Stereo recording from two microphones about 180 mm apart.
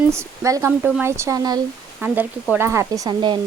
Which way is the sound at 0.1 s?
15° right (ahead or behind).